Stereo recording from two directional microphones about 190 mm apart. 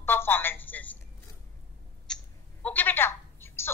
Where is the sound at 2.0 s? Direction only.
5° left (ahead or behind).